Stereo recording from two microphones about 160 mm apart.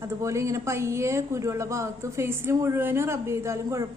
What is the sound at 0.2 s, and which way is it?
A woman's voice, 20° right (ahead or behind).